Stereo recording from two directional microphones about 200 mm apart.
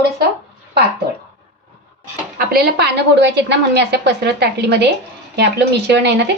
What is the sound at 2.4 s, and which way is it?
A woman's voice, 50° right (ahead or behind).